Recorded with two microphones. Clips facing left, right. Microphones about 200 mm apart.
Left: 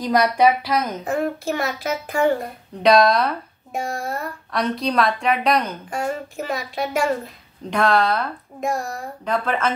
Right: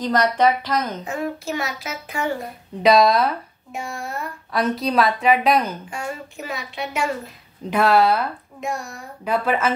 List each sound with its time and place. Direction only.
0.0 s a woman's voice: 10° left (ahead or behind)
1.0 s a child's voice: 50° left (ahead or behind)
2.8 s a woman's voice: centre (ahead or behind)
3.7 s a child's voice: 40° left (ahead or behind)
4.5 s a woman's voice: centre (ahead or behind)
5.9 s a child's voice: 50° left (ahead or behind)
7.7 s speech: 5° right (ahead or behind)